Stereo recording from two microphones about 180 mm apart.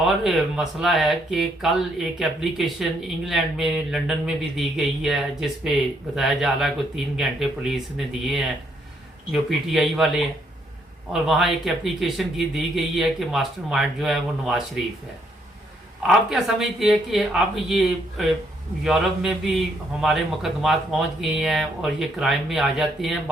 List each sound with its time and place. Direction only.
0.0 s speech: centre (ahead or behind)
16.0 s speech: centre (ahead or behind)